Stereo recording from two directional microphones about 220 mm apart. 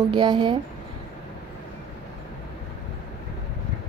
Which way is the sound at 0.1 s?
20° right (ahead or behind).